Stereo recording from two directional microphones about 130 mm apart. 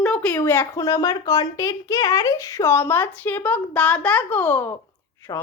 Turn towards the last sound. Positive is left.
turn(degrees=30)  # may be behind; listen again after turning